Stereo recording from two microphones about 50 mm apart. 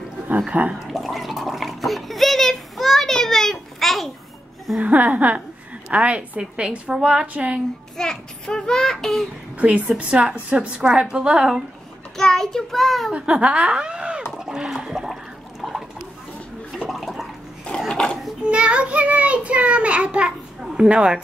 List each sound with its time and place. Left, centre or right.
0.5 s a child's voice: right
0.8 s water: centre
4.7 s a woman's voice: right
5.9 s a child's voice: right
8.0 s a child's voice: centre
9.6 s a woman's voice: right
10.8 s a woman's voice: centre
12.2 s child singing: centre
13.2 s speech: right
15.6 s a sound: centre
16.9 s water: centre
17.7 s a sound: centre
18.4 s a child's voice: right